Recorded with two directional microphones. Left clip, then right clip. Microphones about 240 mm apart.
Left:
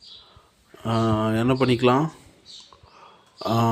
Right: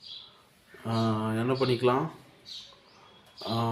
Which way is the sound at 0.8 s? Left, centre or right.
Left.